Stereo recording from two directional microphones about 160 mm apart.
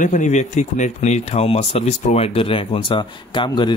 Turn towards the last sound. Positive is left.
turn(degrees=30)  # may be behind; listen again after turning